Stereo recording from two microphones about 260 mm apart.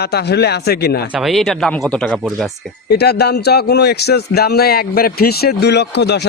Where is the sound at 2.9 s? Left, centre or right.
Left.